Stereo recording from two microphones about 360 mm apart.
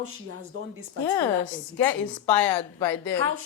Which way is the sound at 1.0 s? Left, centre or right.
Centre.